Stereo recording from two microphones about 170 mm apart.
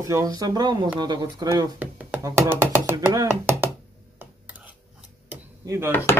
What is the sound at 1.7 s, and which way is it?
Speech, 10° right (ahead or behind).